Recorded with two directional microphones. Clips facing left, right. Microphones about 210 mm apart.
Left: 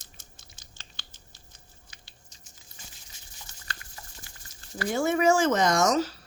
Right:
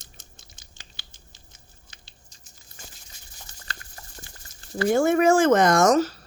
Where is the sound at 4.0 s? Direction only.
50° right (ahead or behind).